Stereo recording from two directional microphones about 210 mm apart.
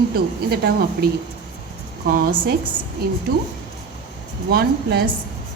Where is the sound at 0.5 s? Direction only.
50° right (ahead or behind).